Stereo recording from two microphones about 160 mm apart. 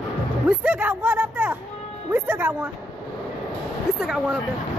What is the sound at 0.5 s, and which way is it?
Speech, 10° right (ahead or behind).